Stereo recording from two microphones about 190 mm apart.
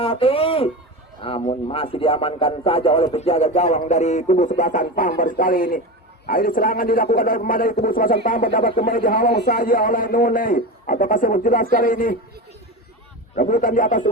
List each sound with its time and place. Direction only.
0.0 s a man's voice: 30° left (ahead or behind); by 12.1 s 45° left (ahead or behind)
13.3 s a man's voice: 45° left (ahead or behind)